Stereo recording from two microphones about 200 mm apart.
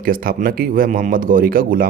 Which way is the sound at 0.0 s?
45° right (ahead or behind).